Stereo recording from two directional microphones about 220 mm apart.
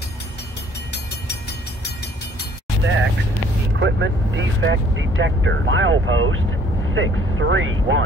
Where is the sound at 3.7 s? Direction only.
55° right (ahead or behind).